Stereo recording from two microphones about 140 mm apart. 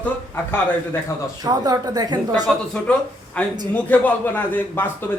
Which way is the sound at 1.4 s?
30° right (ahead or behind).